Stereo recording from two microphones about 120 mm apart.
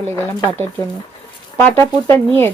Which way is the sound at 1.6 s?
20° left (ahead or behind).